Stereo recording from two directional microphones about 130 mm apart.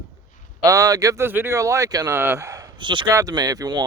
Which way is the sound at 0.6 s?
25° right (ahead or behind).